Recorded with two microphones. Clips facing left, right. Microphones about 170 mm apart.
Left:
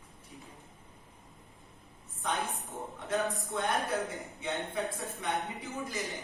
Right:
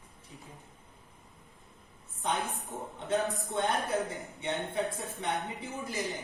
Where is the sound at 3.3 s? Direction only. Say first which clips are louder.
Right 1 dB; centre (ahead or behind).